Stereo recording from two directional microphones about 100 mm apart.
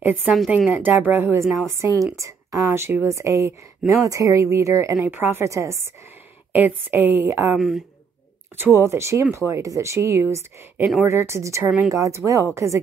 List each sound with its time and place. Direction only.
0.0 s a woman's voice: 20° right (ahead or behind)
1.4 s a woman's voice: centre (ahead or behind)
1.7 s a woman's voice: 25° right (ahead or behind)
6.5 s speech: 15° right (ahead or behind)
7.5 s a woman's voice: centre (ahead or behind)
8.7 s a woman's voice: 25° right (ahead or behind)